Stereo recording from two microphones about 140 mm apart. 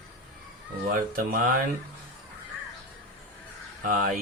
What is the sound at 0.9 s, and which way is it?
Speech, 90° right.